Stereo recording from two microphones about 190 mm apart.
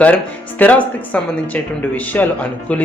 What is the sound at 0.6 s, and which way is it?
Speech, 10° left (ahead or behind).